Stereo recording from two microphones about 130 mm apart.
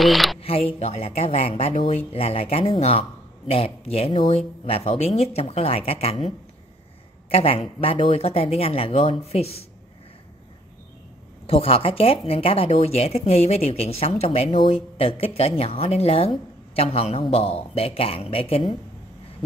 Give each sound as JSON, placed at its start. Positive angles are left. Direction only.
{"t": 0.0, "sound": "speech", "side_deg": 0}
{"t": 0.4, "sound": "speech", "side_deg": 45}
{"t": 7.2, "sound": "speech", "side_deg": 50}
{"t": 11.4, "sound": "speech", "side_deg": 50}